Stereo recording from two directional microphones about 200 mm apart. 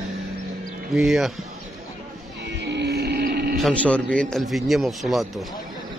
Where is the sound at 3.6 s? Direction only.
5° left (ahead or behind).